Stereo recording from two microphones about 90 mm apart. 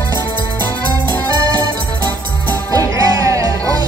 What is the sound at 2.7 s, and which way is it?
Music, 40° right (ahead or behind).